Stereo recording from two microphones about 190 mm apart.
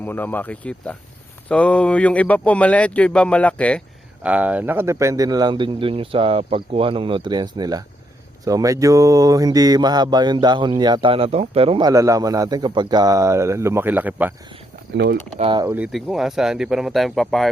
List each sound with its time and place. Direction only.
0.0 s speech: 10° left (ahead or behind)
4.2 s speech: 5° right (ahead or behind)
14.9 s speech: 65° right (ahead or behind)
15.4 s speech: 25° right (ahead or behind)
15.6 s speech: 10° right (ahead or behind)